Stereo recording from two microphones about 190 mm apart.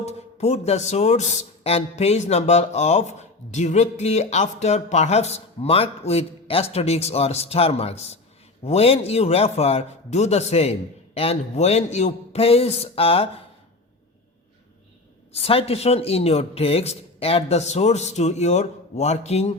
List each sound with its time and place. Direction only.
0.0 s speech: 35° left (ahead or behind)
15.3 s speech: 30° left (ahead or behind)